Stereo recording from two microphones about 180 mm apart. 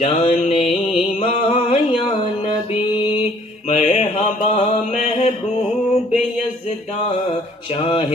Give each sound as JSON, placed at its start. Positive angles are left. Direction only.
{"t": 0.0, "sound": "music", "side_deg": 35}
{"t": 3.7, "sound": "mantra", "side_deg": 35}
{"t": 7.7, "sound": "a sound", "side_deg": 30}